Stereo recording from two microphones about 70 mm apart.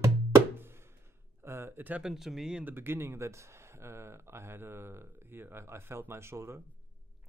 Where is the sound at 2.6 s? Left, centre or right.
Right.